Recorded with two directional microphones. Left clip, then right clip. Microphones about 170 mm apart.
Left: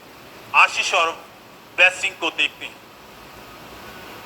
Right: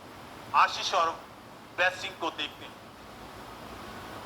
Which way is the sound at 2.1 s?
35° right (ahead or behind).